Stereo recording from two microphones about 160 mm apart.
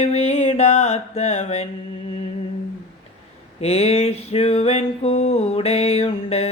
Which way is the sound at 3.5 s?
40° left (ahead or behind).